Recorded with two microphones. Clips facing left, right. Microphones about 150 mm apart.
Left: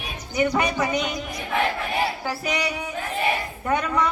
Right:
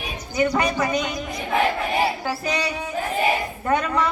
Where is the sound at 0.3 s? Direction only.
15° left (ahead or behind).